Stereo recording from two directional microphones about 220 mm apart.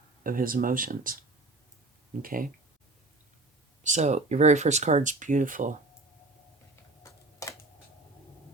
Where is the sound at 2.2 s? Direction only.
40° right (ahead or behind).